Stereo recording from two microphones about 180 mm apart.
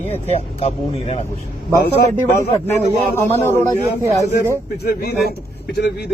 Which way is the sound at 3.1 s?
10° left (ahead or behind).